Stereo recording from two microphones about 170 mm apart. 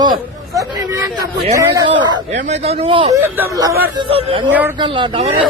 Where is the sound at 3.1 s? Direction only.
10° right (ahead or behind).